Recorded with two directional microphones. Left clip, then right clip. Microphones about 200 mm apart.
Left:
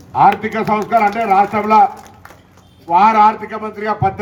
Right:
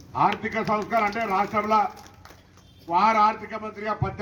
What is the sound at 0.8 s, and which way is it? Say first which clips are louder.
Speech: left 11 dB; 35° left (ahead or behind).